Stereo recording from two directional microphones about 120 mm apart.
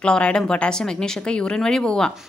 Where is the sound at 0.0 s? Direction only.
10° left (ahead or behind).